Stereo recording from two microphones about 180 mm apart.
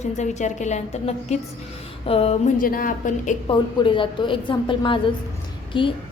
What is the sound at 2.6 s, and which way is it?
Speech, 50° left (ahead or behind).